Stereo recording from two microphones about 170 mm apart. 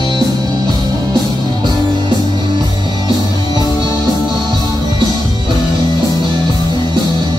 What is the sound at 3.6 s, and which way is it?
Music, 20° left (ahead or behind).